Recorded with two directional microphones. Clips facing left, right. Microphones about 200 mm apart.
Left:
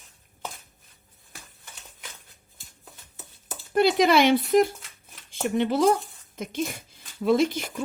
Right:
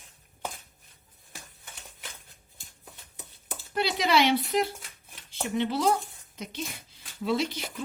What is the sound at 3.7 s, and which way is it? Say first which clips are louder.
Speech: left 6 dB; 50° left (ahead or behind).